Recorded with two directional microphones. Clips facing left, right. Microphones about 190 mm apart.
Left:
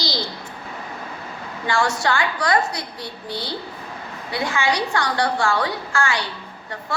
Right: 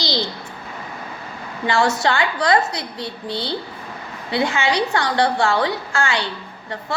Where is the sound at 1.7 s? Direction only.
25° right (ahead or behind).